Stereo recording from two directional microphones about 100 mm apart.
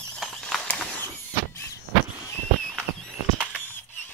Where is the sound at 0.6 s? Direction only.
15° left (ahead or behind).